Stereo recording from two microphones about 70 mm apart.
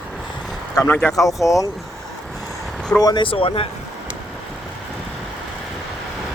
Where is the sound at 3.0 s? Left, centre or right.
Left.